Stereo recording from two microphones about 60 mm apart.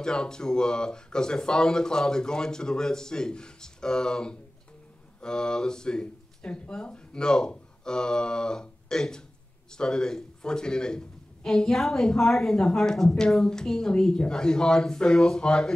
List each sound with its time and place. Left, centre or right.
0.0 s speech: centre